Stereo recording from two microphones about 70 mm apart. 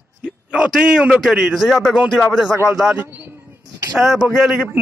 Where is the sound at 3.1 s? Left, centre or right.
Right.